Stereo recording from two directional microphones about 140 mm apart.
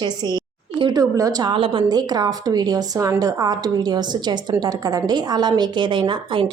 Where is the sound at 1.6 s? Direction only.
40° right (ahead or behind).